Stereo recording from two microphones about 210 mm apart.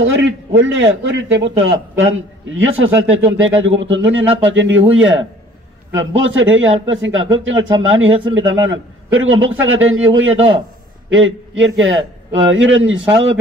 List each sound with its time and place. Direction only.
0.0 s a man's voice: 60° right (ahead or behind)